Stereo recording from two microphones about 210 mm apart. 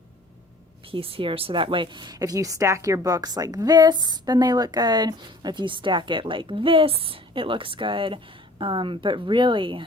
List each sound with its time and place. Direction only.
0.9 s a woman's voice: 25° right (ahead or behind)